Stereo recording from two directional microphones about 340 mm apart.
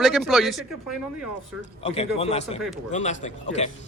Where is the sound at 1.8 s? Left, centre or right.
Centre.